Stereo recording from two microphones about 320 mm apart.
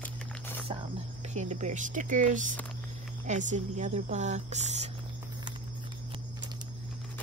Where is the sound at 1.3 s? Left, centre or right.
Right.